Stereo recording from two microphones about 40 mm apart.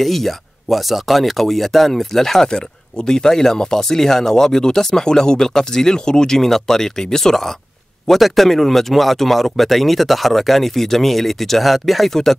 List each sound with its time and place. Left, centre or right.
0.0 s speech: centre
2.4 s speech: centre